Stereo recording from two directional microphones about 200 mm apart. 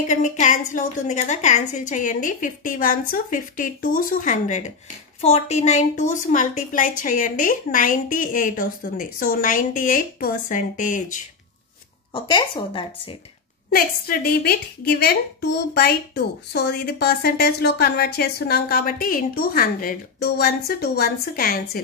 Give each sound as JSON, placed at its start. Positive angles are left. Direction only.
{"t": 0.1, "sound": "a woman's voice", "side_deg": 40}
{"t": 12.1, "sound": "speech", "side_deg": 25}
{"t": 13.7, "sound": "a woman's voice", "side_deg": 45}